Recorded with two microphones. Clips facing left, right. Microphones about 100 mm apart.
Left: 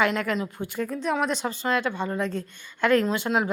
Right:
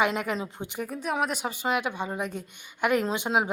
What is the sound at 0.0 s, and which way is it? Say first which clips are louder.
A woman's voice: left 2 dB; 20° right (ahead or behind).